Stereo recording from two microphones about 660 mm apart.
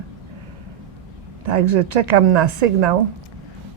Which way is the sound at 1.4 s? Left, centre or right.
Right.